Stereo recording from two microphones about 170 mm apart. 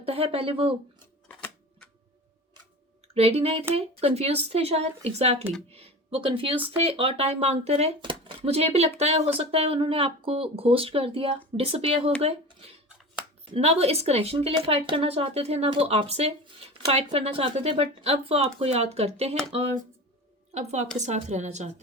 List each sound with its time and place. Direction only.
0.0 s speech: 35° right (ahead or behind)
1.3 s typewriter: 5° left (ahead or behind)
3.2 s speech: 35° right (ahead or behind)
20.5 s speech: 40° right (ahead or behind)